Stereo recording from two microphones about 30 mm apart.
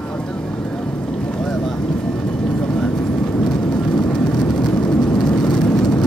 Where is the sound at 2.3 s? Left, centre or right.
Left.